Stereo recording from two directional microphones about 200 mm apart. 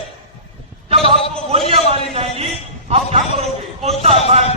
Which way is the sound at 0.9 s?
30° right (ahead or behind).